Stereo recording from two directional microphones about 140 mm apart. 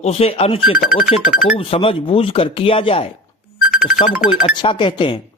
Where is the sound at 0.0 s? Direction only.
45° left (ahead or behind).